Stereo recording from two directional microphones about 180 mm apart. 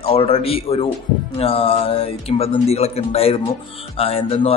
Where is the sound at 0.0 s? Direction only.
30° left (ahead or behind).